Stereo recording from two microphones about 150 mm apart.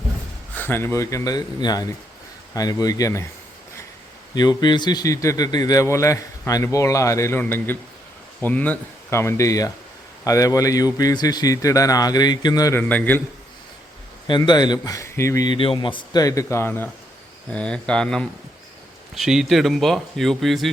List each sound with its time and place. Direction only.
0.5 s a man's voice: 15° left (ahead or behind)
4.4 s a man's voice: 30° left (ahead or behind)
12.9 s speech: 10° left (ahead or behind)
14.3 s a man's voice: 30° left (ahead or behind)
15.5 s a man's voice: 35° left (ahead or behind); by 20.7 s centre (ahead or behind)